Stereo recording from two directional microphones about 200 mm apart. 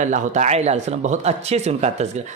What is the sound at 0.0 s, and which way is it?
Speech, 35° right (ahead or behind).